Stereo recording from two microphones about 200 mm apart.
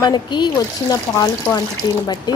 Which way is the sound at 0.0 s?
20° left (ahead or behind).